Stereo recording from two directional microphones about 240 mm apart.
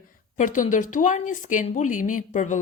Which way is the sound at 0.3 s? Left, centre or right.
Left.